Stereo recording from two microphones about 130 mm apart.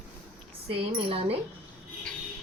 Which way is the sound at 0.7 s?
45° right (ahead or behind).